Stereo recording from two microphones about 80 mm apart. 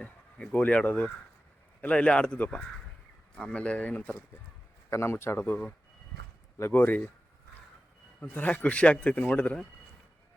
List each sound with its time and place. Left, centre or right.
0.0 s a man's voice: centre
4.9 s a man's voice: left
6.6 s speech: left
8.2 s a man's voice: centre